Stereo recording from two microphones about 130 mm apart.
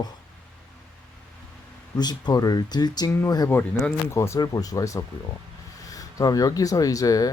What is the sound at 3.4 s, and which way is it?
Speech, 15° left (ahead or behind).